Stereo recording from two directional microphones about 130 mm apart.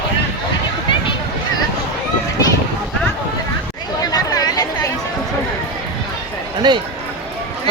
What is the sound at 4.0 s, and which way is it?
Chatter, 30° left (ahead or behind).